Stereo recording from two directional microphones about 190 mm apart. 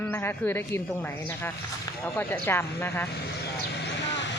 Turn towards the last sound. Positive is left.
turn(degrees=70)  # may be behind; listen again after turning